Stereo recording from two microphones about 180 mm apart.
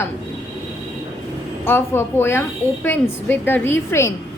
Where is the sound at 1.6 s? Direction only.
15° left (ahead or behind).